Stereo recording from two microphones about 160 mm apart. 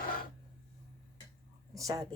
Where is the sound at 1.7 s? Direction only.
20° right (ahead or behind).